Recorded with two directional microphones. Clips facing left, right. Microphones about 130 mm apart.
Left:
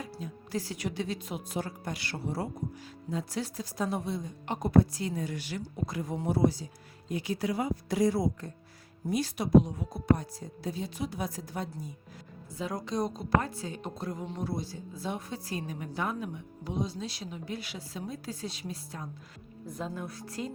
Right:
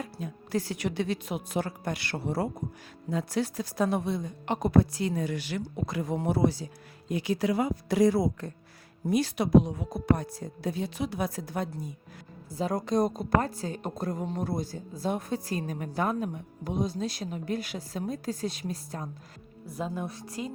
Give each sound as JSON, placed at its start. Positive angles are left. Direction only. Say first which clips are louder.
{"t": 0.0, "sound": "speech", "louder": "right 3 dB", "side_deg": -60}
{"t": 12.5, "sound": "speech", "louder": "right 5 dB", "side_deg": -35}
{"t": 12.7, "sound": "a woman's voice", "louder": "right 6 dB", "side_deg": -50}
{"t": 19.6, "sound": "a woman's voice", "louder": "right 3 dB", "side_deg": -10}